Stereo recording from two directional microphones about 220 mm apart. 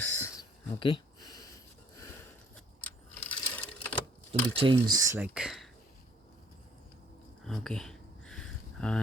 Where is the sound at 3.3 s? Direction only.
5° left (ahead or behind).